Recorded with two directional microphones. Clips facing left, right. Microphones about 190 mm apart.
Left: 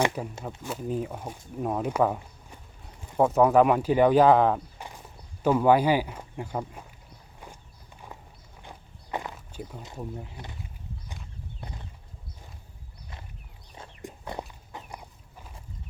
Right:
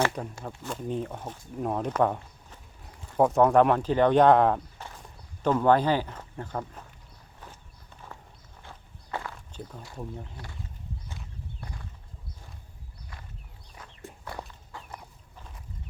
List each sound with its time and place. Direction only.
0.4 s speech: 5° left (ahead or behind)
7.3 s walk: 15° left (ahead or behind)
8.6 s walk: 15° left (ahead or behind)
10.0 s speech: 5° left (ahead or behind)
11.6 s a sound: 20° left (ahead or behind)
14.0 s chicken: 20° left (ahead or behind)